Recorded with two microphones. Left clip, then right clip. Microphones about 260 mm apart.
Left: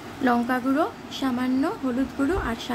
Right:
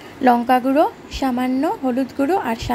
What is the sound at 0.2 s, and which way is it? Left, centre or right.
A woman's voice, right.